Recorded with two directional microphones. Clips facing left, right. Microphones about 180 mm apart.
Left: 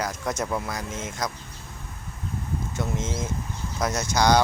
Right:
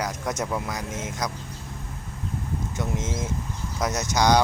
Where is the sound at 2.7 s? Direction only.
15° right (ahead or behind).